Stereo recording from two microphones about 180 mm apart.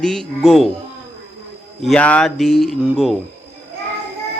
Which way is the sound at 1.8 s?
5° left (ahead or behind).